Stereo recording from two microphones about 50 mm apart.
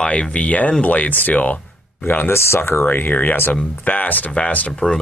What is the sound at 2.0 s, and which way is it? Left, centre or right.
Speech, left.